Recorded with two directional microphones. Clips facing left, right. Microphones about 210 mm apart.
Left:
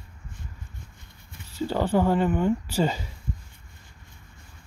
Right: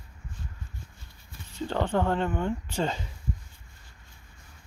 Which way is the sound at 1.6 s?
10° left (ahead or behind).